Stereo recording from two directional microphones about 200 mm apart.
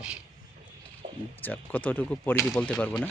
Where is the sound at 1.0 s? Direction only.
35° right (ahead or behind).